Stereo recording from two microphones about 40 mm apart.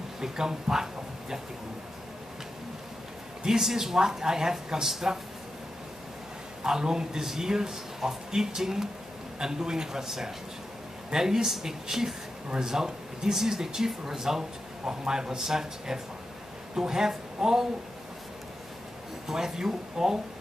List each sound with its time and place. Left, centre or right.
0.2 s speech: centre
3.4 s speech: centre
6.6 s speech: centre
19.2 s speech: centre